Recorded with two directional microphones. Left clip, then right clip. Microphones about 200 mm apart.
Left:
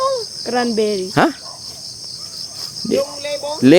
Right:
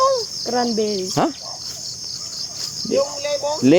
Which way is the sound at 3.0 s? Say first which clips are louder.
Right 1 dB; 10° left (ahead or behind).